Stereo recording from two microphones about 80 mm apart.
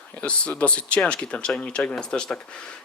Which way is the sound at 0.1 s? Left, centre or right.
Centre.